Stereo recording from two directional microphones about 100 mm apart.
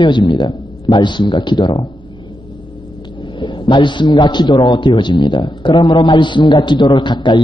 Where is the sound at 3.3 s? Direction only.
55° left (ahead or behind).